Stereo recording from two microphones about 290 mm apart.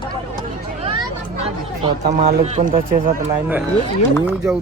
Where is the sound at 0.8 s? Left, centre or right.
Centre.